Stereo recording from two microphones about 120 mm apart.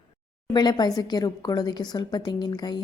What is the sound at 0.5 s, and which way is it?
A woman's voice, 35° left (ahead or behind).